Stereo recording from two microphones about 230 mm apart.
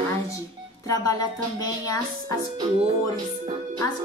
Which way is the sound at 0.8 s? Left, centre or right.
Centre.